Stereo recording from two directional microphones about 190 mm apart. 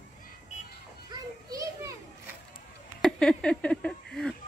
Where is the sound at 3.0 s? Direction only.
Centre (ahead or behind).